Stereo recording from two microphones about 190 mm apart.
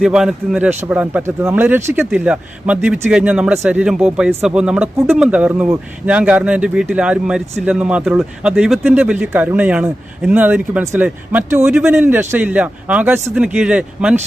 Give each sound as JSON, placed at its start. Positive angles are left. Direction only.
{"t": 0.0, "sound": "speech", "side_deg": -5}